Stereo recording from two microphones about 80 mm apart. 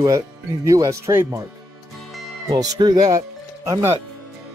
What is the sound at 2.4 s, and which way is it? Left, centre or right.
Speech, right.